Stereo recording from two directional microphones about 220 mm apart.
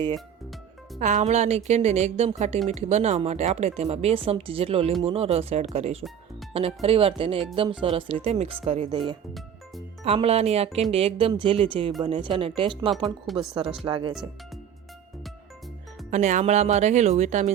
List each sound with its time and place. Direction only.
0.9 s speech: 35° right (ahead or behind)
13.3 s speech: centre (ahead or behind)
13.8 s speech: 25° right (ahead or behind)
16.0 s speech: 35° right (ahead or behind)